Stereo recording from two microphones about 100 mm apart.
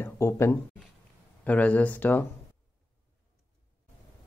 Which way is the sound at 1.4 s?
15° left (ahead or behind).